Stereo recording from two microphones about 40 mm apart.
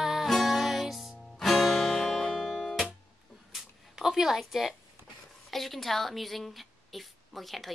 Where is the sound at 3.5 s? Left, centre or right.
Centre.